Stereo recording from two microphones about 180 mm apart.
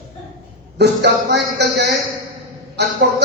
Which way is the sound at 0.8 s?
70° right (ahead or behind).